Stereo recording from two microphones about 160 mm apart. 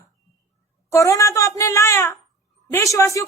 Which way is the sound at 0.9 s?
20° left (ahead or behind).